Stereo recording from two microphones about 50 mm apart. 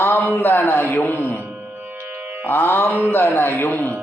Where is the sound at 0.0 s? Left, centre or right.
Left.